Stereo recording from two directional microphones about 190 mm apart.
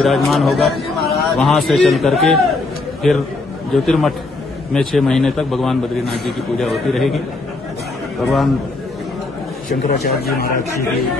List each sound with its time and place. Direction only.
0.0 s a man's voice: centre (ahead or behind)
8.2 s a man's voice: centre (ahead or behind)
9.7 s a man's voice: 50° left (ahead or behind)